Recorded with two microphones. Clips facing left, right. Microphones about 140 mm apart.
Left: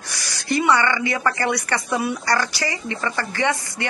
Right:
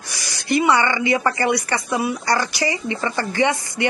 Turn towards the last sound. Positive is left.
turn(degrees=-15)  # may be behind; listen again after turning